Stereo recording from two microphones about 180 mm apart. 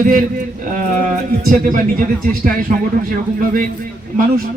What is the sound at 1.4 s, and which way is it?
Music, 50° right (ahead or behind).